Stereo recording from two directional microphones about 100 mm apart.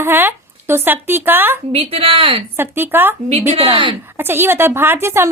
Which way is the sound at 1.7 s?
80° right.